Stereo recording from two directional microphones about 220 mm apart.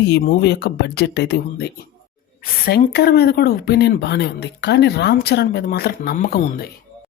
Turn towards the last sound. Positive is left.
turn(degrees=45)  # may be behind; listen again after turning